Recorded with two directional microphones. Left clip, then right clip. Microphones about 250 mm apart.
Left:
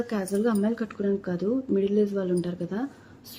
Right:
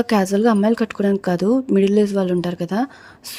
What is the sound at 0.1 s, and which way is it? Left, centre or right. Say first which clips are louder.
Speech: right 11 dB; right.